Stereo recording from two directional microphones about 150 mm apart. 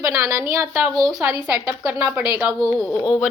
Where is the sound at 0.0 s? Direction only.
20° right (ahead or behind).